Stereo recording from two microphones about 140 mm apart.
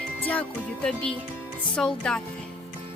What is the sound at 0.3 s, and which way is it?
Speech, 10° left (ahead or behind).